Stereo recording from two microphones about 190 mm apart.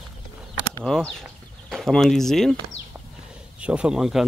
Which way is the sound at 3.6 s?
5° right (ahead or behind).